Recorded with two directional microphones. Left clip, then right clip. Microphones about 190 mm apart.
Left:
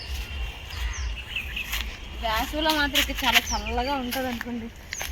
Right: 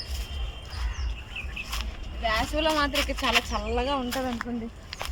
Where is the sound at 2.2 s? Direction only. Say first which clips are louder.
Even; 15° right (ahead or behind).